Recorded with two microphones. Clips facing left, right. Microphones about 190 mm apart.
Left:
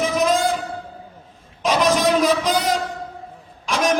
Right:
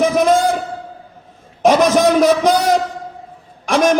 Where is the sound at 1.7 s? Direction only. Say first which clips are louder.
Right 6 dB; 45° right (ahead or behind).